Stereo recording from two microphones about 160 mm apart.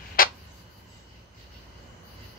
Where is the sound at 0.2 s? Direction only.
65° left (ahead or behind).